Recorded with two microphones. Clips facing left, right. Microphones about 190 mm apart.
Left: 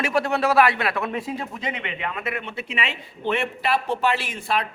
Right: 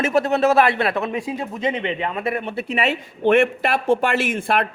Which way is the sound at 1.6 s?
30° right (ahead or behind).